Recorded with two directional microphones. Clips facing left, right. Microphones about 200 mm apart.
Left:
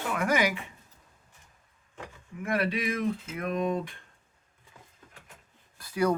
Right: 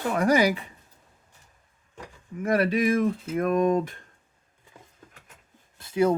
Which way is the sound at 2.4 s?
40° right (ahead or behind).